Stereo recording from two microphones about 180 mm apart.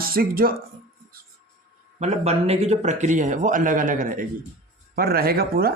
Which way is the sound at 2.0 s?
35° right (ahead or behind).